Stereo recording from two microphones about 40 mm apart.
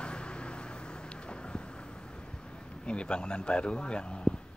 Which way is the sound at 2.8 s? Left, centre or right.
Left.